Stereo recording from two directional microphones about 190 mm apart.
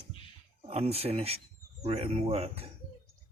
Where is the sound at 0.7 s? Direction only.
30° right (ahead or behind).